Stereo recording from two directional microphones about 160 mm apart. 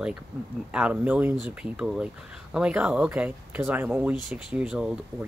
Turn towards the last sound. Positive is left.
turn(degrees=-5)  # may be behind; listen again after turning